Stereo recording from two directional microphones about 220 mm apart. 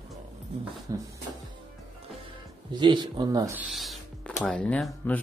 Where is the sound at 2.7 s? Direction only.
20° right (ahead or behind).